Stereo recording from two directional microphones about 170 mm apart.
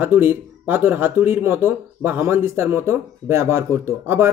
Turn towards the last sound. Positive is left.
turn(degrees=-15)  # may be behind; listen again after turning